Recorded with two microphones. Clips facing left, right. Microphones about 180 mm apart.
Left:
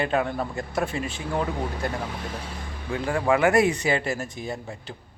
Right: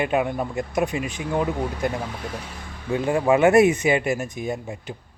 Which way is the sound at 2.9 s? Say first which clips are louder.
Right 4 dB; 20° right (ahead or behind).